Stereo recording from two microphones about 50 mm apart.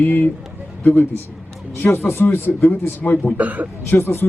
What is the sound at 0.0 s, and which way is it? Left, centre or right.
Speech, left.